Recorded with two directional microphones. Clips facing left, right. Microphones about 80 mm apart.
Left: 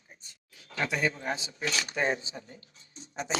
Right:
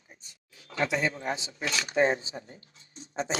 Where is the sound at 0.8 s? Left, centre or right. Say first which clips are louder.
Right 2 dB; right.